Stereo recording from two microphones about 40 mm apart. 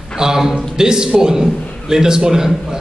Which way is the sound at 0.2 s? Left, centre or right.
Centre.